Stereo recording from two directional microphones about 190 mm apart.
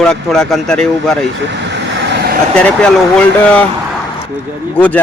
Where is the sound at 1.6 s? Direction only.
65° right (ahead or behind).